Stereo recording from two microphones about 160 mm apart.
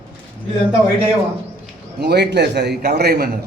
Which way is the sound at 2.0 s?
90° right.